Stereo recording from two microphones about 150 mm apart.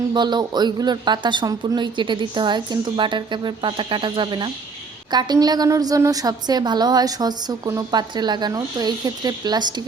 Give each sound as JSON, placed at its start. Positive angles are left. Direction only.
{"t": 0.1, "sound": "a woman's voice", "side_deg": -30}